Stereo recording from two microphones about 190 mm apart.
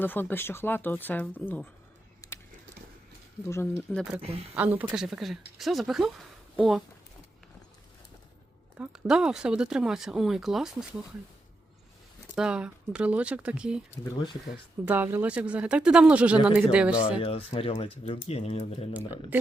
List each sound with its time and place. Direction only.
0.0 s speech: 10° left (ahead or behind)
2.2 s a sound: 15° left (ahead or behind)
3.5 s speech: 10° left (ahead or behind)
4.5 s speech: 10° right (ahead or behind)
8.8 s speech: 5° right (ahead or behind)
12.4 s speech: 5° right (ahead or behind)
14.0 s speech: 25° left (ahead or behind)
14.8 s speech: 10° right (ahead or behind)
17.2 s speech: 30° left (ahead or behind)